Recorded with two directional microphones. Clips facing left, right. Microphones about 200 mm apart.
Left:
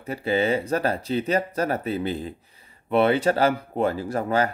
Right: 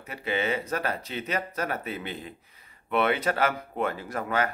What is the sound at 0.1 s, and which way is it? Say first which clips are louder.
Speech: left 6 dB; 35° left (ahead or behind).